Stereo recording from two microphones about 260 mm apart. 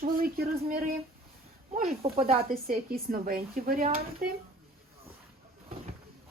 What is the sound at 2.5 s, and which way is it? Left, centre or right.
A woman's voice, right.